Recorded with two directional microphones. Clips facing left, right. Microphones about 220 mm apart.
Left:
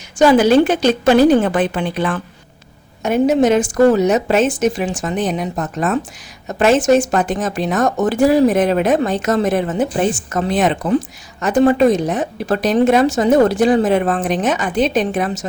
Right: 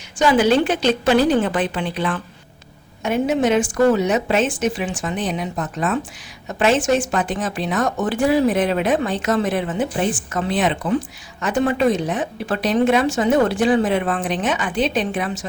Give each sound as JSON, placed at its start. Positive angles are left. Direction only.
{"t": 0.2, "sound": "speech", "side_deg": 40}